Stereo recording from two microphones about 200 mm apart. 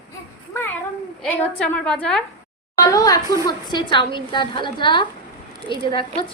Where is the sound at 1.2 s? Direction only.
5° left (ahead or behind).